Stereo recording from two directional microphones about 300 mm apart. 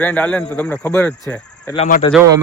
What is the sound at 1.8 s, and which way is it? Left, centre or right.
Speech, left.